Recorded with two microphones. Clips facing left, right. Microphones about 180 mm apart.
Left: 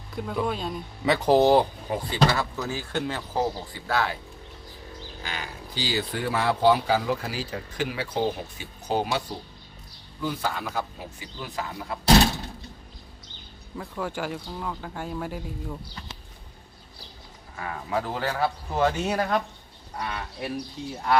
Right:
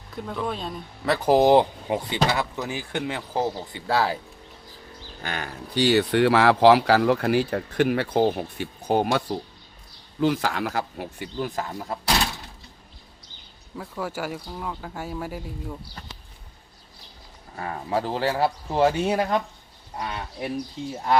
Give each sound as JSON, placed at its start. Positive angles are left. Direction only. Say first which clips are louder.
{"t": 0.2, "sound": "speech", "louder": "left 1 dB", "side_deg": 5}
{"t": 5.2, "sound": "speech", "louder": "right 5 dB", "side_deg": -55}
{"t": 10.2, "sound": "speech", "louder": "right 6 dB", "side_deg": -80}
{"t": 11.3, "sound": "speech", "louder": "right 5 dB", "side_deg": -45}
{"t": 13.7, "sound": "speech", "louder": "even", "side_deg": -5}
{"t": 17.6, "sound": "speech", "louder": "right 3 dB", "side_deg": -35}